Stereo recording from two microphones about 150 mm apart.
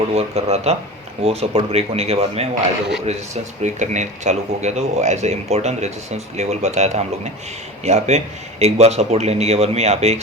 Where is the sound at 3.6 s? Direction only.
50° right (ahead or behind).